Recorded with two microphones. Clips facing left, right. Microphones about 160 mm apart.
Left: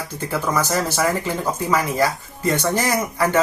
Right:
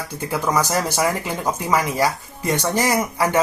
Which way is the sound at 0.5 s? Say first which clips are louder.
Even; 15° right (ahead or behind).